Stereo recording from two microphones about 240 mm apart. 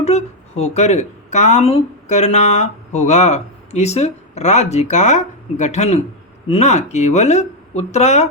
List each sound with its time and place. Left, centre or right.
0.0 s speech: left